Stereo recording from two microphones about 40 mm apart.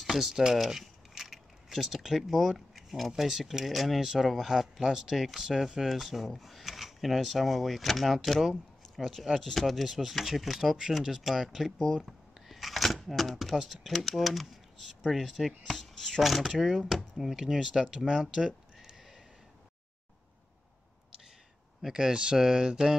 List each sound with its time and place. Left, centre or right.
0.0 s speech: centre
0.6 s keys jangling: centre
3.2 s speech: centre
11.8 s shuffling cards: centre
13.6 s speech: centre
15.7 s a sound: centre
16.2 s speech: centre
18.2 s a sound: centre
21.8 s speech: centre